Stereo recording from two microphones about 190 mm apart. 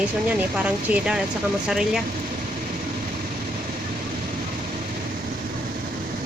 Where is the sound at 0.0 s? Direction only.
5° right (ahead or behind).